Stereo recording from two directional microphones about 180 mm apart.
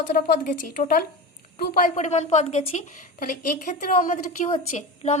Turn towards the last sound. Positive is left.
turn(degrees=40)  # may be behind; listen again after turning